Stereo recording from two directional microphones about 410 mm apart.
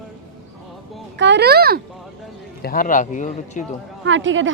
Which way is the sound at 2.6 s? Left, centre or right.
Left.